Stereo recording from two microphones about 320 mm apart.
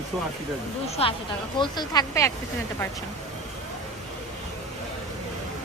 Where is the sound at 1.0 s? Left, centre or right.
Centre.